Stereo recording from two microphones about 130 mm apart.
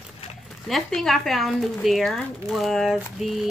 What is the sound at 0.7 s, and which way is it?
Speech, centre (ahead or behind).